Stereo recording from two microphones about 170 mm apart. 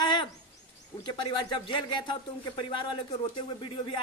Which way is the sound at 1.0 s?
25° left (ahead or behind).